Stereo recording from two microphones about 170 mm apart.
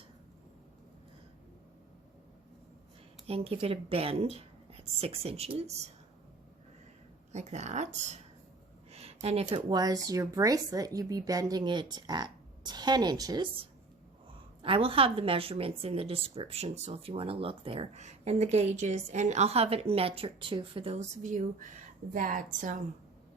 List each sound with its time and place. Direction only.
3.2 s a woman's voice: 35° right (ahead or behind)
7.3 s speech: 40° right (ahead or behind)
8.9 s a sound: 35° right (ahead or behind)
9.6 s a woman's voice: 25° right (ahead or behind); by 22.8 s 50° right (ahead or behind)